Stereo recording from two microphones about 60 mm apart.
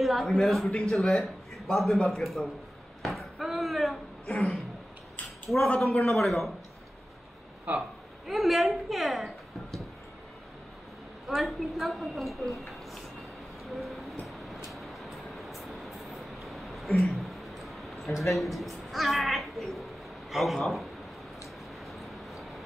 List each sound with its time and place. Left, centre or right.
0.0 s a woman's voice: centre
3.0 s a sound: centre
6.0 s a woman's voice: centre
7.7 s speech: right
8.3 s a woman's voice: centre
11.2 s a woman's voice: centre
13.7 s vehicle: centre
20.2 s a man's voice: centre
21.9 s vehicle: centre